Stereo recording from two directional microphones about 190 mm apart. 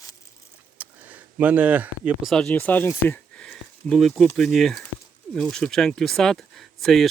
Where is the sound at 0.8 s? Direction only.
10° right (ahead or behind).